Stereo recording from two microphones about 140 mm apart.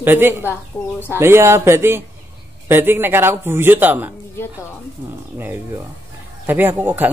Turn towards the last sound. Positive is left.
turn(degrees=-15)  # may be behind; listen again after turning